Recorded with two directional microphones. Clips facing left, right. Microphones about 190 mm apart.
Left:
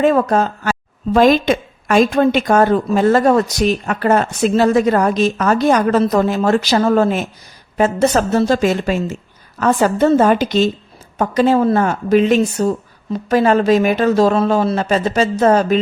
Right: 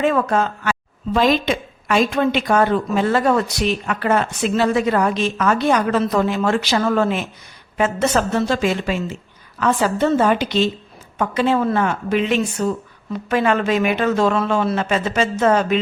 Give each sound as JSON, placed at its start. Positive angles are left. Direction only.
{"t": 0.0, "sound": "a woman's voice", "side_deg": 40}